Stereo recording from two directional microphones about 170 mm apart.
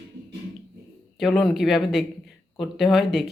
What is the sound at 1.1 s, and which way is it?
Speech, centre (ahead or behind).